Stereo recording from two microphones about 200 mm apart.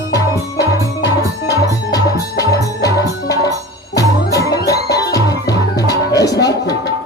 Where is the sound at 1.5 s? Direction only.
15° left (ahead or behind).